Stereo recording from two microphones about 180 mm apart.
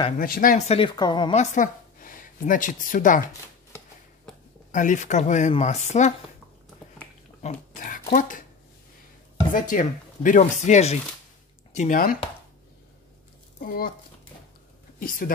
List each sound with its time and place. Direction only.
0.2 s speech: 50° left (ahead or behind); by 1.3 s 25° left (ahead or behind)
1.3 s speech: 40° left (ahead or behind)
4.7 s speech: 45° left (ahead or behind)
7.4 s speech: 45° left (ahead or behind)
9.5 s speech: 45° left (ahead or behind)
13.6 s speech: 55° left (ahead or behind)
15.0 s speech: 50° left (ahead or behind)